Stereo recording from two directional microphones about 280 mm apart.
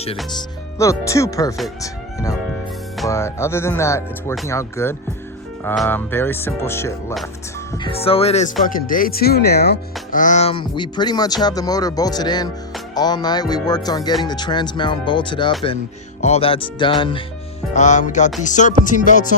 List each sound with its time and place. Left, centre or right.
0.8 s speech: centre
7.7 s music: centre
8.6 s speech: left
17.7 s music: left